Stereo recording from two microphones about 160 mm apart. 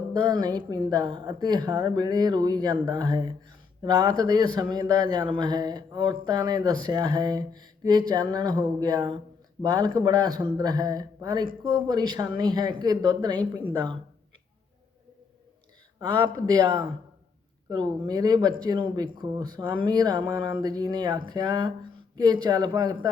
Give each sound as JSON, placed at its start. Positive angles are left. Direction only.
{"t": 0.1, "sound": "speech", "side_deg": -25}
{"t": 16.0, "sound": "speech", "side_deg": -30}